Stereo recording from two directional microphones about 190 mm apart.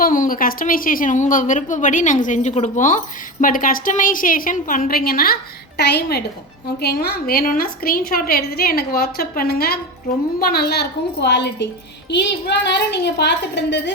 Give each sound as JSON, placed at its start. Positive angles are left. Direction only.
{"t": 0.0, "sound": "a woman's voice", "side_deg": 45}